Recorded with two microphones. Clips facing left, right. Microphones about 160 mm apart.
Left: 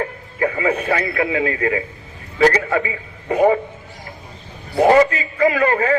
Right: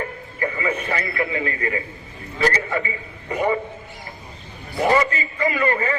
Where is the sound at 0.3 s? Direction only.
70° left (ahead or behind); by 1.8 s 90° left.